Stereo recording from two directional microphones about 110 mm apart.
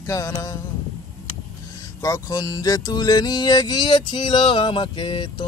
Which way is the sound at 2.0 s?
35° left (ahead or behind).